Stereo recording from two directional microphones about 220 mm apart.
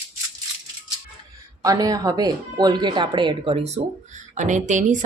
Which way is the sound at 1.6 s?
15° right (ahead or behind).